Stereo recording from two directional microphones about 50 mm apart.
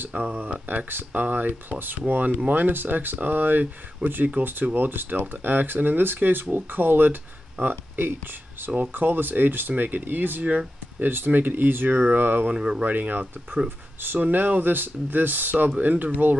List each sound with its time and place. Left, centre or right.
0.1 s speech: right
12.5 s speech: centre
12.8 s speech: right